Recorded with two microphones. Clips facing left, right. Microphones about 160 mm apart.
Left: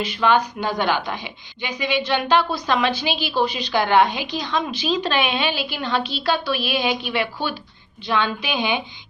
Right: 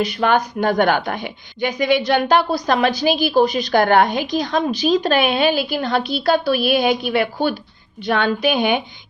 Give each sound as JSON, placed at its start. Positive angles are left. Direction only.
{"t": 0.1, "sound": "a woman's voice", "side_deg": -45}